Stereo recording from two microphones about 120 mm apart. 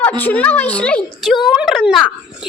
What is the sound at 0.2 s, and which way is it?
Speech, 15° left (ahead or behind).